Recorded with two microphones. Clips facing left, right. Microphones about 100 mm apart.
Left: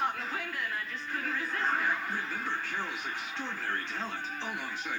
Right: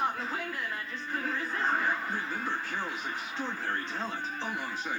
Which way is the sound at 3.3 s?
15° right (ahead or behind).